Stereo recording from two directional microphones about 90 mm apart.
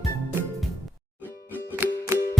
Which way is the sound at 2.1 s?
35° right (ahead or behind).